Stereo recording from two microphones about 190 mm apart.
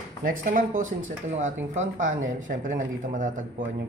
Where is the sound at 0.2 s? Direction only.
45° right (ahead or behind).